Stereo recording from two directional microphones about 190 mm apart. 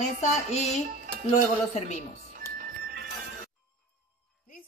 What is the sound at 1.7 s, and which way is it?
Speech, 35° left (ahead or behind).